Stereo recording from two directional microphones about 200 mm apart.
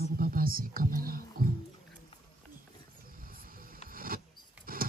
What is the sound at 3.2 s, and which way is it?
Music, 45° right (ahead or behind).